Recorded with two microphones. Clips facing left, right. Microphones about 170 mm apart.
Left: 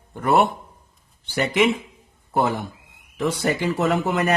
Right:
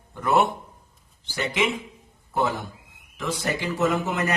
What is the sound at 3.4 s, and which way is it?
Speech, 65° left (ahead or behind).